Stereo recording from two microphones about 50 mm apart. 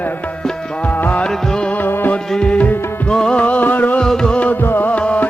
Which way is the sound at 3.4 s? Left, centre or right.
Left.